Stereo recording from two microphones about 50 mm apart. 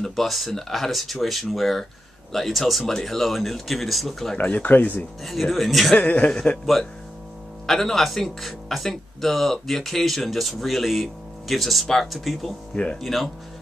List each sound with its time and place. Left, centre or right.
0.0 s speech: centre
4.4 s speech: left
5.2 s speech: centre
5.9 s a man's voice: left
6.6 s a man's voice: centre